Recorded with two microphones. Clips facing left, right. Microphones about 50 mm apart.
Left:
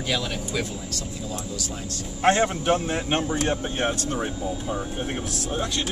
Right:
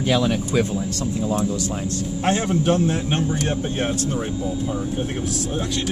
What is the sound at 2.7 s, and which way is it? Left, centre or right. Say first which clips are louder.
Speech: right 3 dB; centre.